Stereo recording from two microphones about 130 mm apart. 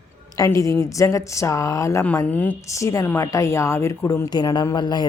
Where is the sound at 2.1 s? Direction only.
10° left (ahead or behind).